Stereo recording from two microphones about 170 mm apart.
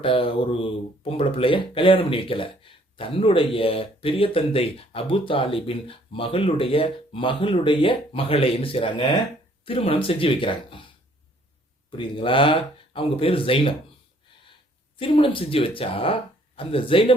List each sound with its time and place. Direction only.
0.0 s speech: 30° left (ahead or behind)
11.9 s speech: 30° left (ahead or behind)
14.9 s speech: 30° left (ahead or behind)